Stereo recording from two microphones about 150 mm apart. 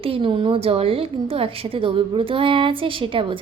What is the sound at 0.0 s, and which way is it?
A woman's voice, 35° right (ahead or behind).